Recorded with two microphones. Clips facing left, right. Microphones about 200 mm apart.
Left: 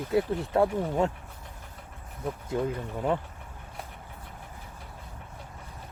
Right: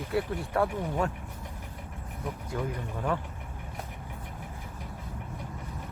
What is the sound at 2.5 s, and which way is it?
Speech, 20° left (ahead or behind).